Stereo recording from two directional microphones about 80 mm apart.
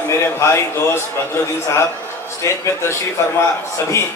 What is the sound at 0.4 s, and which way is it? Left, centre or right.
Speech, left.